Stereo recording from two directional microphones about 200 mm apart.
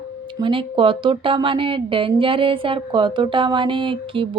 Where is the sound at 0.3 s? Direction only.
25° right (ahead or behind).